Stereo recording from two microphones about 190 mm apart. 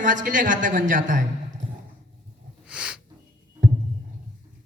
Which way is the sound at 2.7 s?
5° right (ahead or behind).